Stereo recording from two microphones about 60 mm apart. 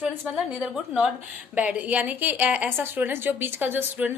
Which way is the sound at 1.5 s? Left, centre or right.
Right.